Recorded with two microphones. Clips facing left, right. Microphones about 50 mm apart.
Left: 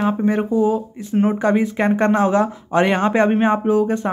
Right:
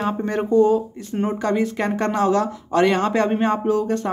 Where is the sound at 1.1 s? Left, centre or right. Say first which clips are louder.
Left 4 dB; left.